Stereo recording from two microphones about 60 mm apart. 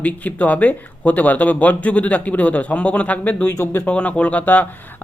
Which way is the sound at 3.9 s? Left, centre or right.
Left.